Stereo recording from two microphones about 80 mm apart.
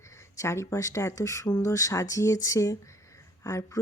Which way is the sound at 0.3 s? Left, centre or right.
Left.